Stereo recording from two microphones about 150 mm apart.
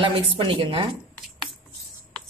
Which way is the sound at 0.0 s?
35° right (ahead or behind).